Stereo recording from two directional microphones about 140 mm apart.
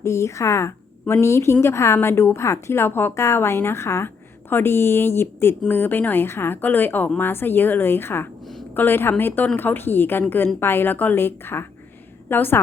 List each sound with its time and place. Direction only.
0.0 s a woman's voice: 20° left (ahead or behind)